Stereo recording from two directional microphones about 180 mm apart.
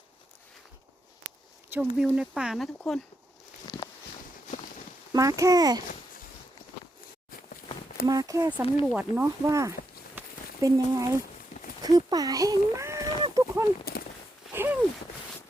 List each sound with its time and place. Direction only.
1.7 s speech: 10° right (ahead or behind)
5.1 s a child's voice: 20° right (ahead or behind)
8.0 s a child's voice: 20° right (ahead or behind)
8.8 s speech: 5° right (ahead or behind)
10.2 s a sound: 20° right (ahead or behind)
13.9 s walk: 60° left (ahead or behind)
14.5 s a sound: 10° right (ahead or behind)